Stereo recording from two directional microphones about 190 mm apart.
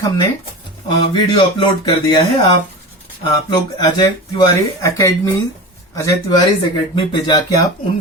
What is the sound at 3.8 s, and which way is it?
Speech, 20° left (ahead or behind).